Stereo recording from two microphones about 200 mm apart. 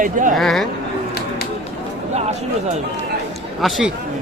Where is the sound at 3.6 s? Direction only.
Centre (ahead or behind).